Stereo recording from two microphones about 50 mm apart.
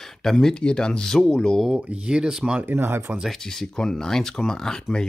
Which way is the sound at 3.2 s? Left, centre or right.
Centre.